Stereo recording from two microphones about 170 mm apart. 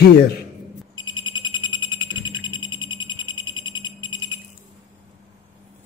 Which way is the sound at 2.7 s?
25° left (ahead or behind).